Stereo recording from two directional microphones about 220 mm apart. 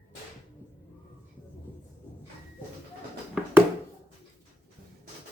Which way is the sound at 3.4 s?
5° right (ahead or behind).